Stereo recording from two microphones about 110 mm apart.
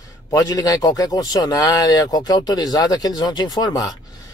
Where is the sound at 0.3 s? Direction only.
35° left (ahead or behind).